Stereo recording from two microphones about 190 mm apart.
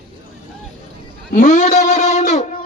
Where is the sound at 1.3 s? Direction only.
40° left (ahead or behind).